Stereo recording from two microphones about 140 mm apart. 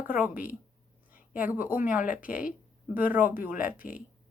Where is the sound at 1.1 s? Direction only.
15° right (ahead or behind).